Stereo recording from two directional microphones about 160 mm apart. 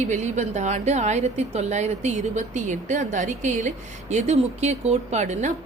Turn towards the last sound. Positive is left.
turn(degrees=-45)  # may be behind; listen again after turning